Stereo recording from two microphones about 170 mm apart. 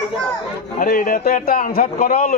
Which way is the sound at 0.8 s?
55° left (ahead or behind).